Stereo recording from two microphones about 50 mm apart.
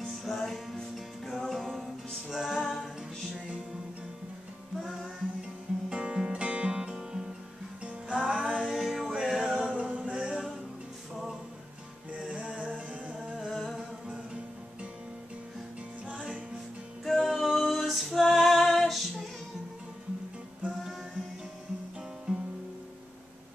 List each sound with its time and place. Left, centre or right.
0.0 s music: centre
4.7 s music: centre
5.9 s music: right
9.8 s a sound: right
12.1 s music: right
13.5 s humming: centre
13.7 s music: centre
17.0 s music: centre
22.3 s music: centre